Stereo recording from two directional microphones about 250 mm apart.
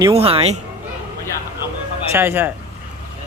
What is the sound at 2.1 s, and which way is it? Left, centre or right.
Speech, centre.